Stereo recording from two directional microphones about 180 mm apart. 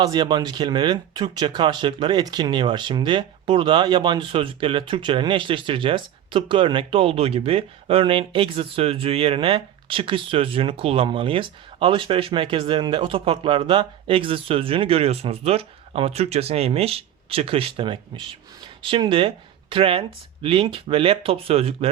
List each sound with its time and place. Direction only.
0.0 s speech: 25° right (ahead or behind)